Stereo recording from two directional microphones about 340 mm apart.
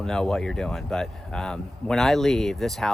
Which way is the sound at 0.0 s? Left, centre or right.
Centre.